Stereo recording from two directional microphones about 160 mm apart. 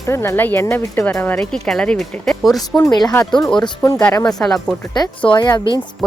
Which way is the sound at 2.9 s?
25° left (ahead or behind).